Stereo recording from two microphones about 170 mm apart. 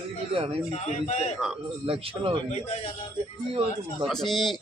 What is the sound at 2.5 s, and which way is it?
Speech, 40° left (ahead or behind).